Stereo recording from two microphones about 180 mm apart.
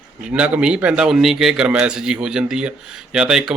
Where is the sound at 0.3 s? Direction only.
5° right (ahead or behind).